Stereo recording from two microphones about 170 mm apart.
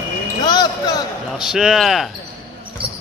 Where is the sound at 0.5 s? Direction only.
25° left (ahead or behind).